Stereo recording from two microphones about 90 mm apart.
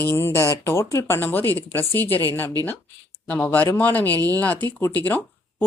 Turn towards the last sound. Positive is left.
turn(degrees=20)  # may be behind; listen again after turning